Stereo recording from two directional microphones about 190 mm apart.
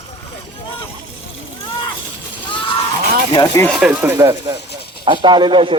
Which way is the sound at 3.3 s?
20° left (ahead or behind).